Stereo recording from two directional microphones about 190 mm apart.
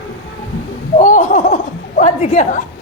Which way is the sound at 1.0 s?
40° left (ahead or behind).